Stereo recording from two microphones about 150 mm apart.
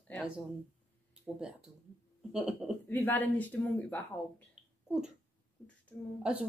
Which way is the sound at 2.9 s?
10° left (ahead or behind).